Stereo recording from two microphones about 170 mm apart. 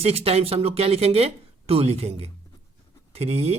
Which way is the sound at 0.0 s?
35° right (ahead or behind).